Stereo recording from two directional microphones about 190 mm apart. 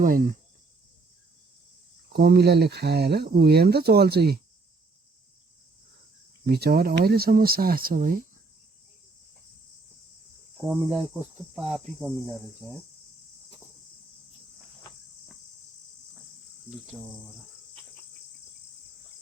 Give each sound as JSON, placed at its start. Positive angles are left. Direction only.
{"t": 0.0, "sound": "speech", "side_deg": -45}
{"t": 2.1, "sound": "speech", "side_deg": -55}
{"t": 6.4, "sound": "speech", "side_deg": -55}
{"t": 10.8, "sound": "cricket", "side_deg": -5}
{"t": 16.6, "sound": "cricket", "side_deg": 0}